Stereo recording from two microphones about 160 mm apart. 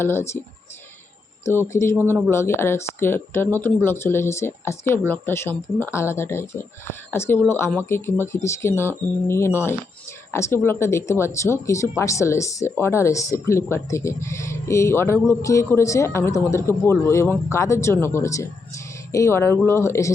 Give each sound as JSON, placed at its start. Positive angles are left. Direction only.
{"t": 0.0, "sound": "speech", "side_deg": 15}
{"t": 1.5, "sound": "speech", "side_deg": 15}
{"t": 2.0, "sound": "speech", "side_deg": -10}
{"t": 2.3, "sound": "speech", "side_deg": 15}